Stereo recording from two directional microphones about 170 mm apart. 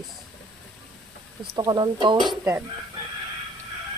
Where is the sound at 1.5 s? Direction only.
25° right (ahead or behind).